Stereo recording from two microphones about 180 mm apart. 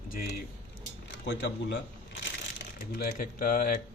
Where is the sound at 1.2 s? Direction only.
75° left (ahead or behind).